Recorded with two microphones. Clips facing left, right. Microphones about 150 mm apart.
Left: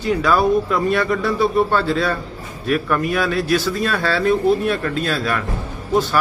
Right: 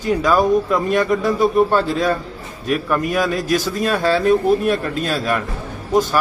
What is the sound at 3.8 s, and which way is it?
Speech, 15° right (ahead or behind).